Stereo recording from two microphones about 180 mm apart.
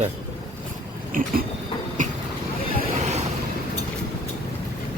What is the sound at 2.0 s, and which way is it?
Vehicle, 45° right (ahead or behind).